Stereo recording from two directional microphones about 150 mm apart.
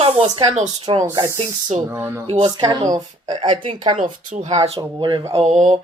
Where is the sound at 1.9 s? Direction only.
15° right (ahead or behind).